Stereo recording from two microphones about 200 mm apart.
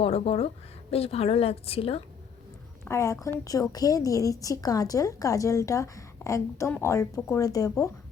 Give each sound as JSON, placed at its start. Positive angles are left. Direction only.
{"t": 0.0, "sound": "speech", "side_deg": 30}
{"t": 2.8, "sound": "a woman's voice", "side_deg": 15}